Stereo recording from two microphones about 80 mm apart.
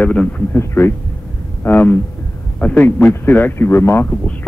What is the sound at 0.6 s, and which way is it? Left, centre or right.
A man's voice, left.